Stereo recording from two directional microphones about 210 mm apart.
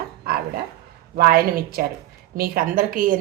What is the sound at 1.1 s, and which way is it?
A woman's voice, 45° right (ahead or behind).